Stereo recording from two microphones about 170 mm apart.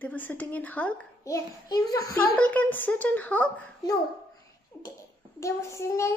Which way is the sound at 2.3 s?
5° left (ahead or behind).